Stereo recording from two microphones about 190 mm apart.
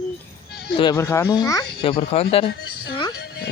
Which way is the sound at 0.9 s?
15° left (ahead or behind).